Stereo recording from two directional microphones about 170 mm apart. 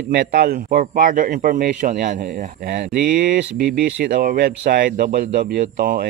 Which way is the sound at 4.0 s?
55° right (ahead or behind).